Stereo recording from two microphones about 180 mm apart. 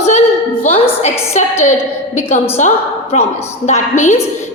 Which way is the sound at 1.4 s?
40° left (ahead or behind).